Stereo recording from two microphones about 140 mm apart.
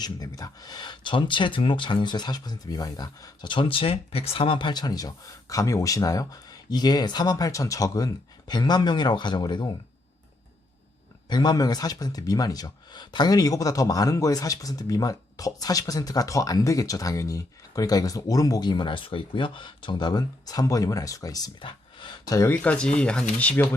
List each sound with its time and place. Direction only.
0.0 s a man's voice: 25° left (ahead or behind)
11.3 s a man's voice: 30° left (ahead or behind)
22.4 s speech: 15° left (ahead or behind)